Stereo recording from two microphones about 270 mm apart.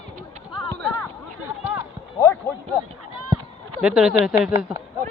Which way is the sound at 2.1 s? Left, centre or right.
Centre.